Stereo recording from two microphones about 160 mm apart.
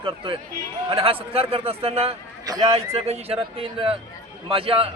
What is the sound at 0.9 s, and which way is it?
A man's voice, 35° right (ahead or behind).